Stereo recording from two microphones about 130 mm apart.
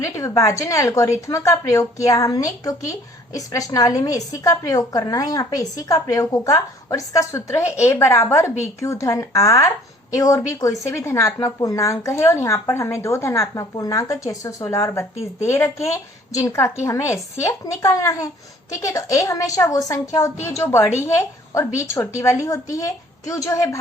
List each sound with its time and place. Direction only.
0.0 s a woman's voice: 25° left (ahead or behind)